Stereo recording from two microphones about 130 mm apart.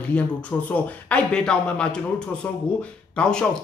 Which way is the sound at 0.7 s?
10° left (ahead or behind).